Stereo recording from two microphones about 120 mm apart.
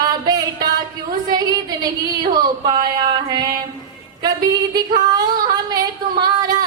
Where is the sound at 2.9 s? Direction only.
35° right (ahead or behind).